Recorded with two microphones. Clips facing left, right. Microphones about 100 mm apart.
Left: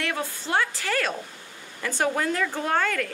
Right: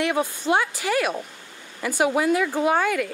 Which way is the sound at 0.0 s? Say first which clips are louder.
Right 7 dB; 20° right (ahead or behind).